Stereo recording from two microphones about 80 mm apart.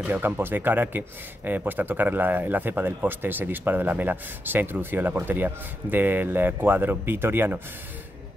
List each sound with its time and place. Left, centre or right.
0.0 s speech: right